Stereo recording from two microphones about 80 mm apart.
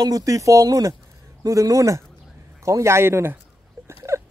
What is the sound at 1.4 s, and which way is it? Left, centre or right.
A man's voice, right.